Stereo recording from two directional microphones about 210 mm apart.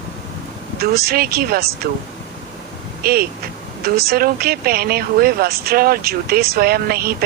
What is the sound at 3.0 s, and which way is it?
Speech, 45° right (ahead or behind).